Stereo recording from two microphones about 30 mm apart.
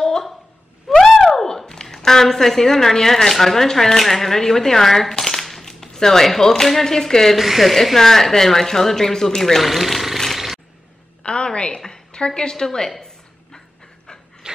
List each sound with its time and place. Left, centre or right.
0.8 s a sound: centre
1.7 s a woman's voice: centre
5.1 s a sound: centre
6.6 s a woman's voice: centre
7.3 s speech: centre
7.7 s a woman's voice: centre
9.6 s speech: centre
10.3 s a sound: centre
11.2 s a woman's voice: left
12.4 s a woman's voice: left
14.4 s pant: right